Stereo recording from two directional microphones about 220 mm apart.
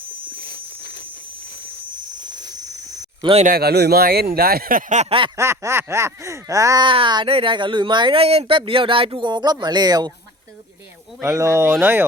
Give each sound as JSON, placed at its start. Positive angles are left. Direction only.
{"t": 0.4, "sound": "a sound", "side_deg": 50}
{"t": 3.2, "sound": "speech", "side_deg": -25}
{"t": 3.4, "sound": "speech", "side_deg": -45}
{"t": 5.4, "sound": "speech", "side_deg": -10}
{"t": 11.2, "sound": "speech", "side_deg": -15}